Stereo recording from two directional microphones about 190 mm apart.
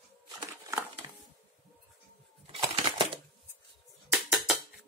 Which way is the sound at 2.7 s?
30° right (ahead or behind).